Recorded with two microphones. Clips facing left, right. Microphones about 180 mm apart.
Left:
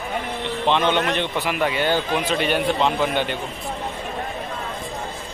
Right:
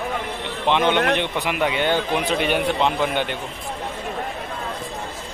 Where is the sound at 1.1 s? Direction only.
15° right (ahead or behind).